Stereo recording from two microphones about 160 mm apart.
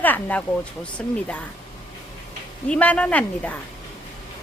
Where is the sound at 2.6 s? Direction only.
5° left (ahead or behind).